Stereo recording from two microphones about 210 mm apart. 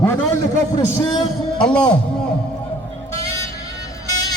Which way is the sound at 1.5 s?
5° left (ahead or behind).